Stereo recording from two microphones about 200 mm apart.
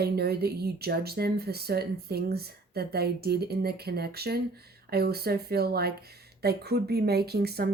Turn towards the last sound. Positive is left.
turn(degrees=-50)  # may be behind; listen again after turning